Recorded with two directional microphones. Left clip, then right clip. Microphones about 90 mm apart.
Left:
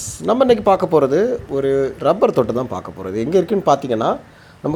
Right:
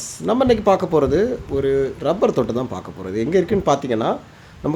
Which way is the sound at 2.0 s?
25° left (ahead or behind).